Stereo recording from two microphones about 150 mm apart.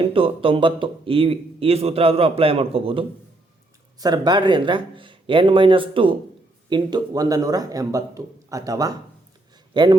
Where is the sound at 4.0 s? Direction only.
25° right (ahead or behind).